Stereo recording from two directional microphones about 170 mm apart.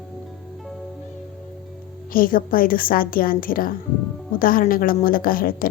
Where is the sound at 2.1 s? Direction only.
55° left (ahead or behind).